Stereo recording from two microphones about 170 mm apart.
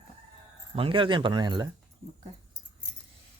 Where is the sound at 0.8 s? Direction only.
30° right (ahead or behind).